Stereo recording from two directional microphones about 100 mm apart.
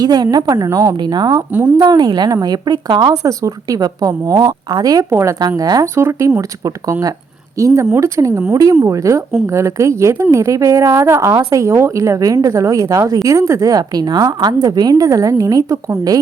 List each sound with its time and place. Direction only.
0.0 s a woman's voice: 45° right (ahead or behind)
1.0 s a woman's voice: 45° right (ahead or behind)
7.6 s a woman's voice: 35° right (ahead or behind)